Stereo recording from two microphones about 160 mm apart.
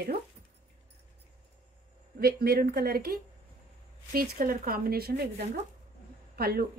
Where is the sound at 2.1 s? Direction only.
75° right (ahead or behind).